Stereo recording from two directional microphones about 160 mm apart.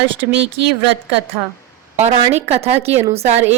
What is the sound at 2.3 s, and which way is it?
A woman's voice, 40° right (ahead or behind).